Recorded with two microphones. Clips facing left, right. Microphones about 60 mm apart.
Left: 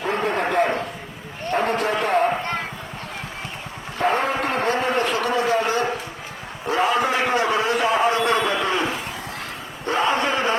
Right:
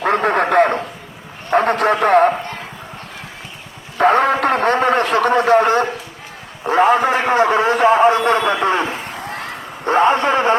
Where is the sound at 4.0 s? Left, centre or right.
Right.